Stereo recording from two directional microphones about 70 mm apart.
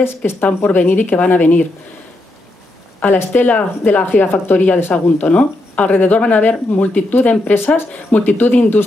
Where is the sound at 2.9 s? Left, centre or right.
Left.